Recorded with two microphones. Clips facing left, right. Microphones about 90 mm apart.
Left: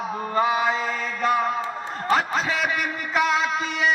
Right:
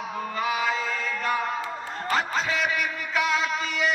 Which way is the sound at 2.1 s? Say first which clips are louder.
Left 4 dB; 40° left (ahead or behind).